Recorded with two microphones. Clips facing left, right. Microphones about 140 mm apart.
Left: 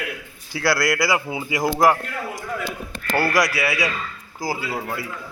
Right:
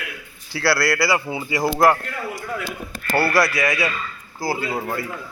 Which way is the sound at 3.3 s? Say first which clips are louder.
Right 1 dB; 10° left (ahead or behind).